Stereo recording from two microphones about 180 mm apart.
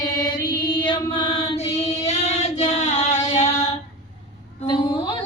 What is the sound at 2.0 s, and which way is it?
Child singing, 35° left (ahead or behind).